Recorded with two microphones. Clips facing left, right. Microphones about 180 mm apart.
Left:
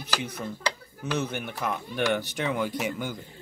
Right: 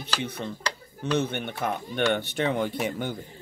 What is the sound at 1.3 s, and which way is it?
Speech, 25° right (ahead or behind).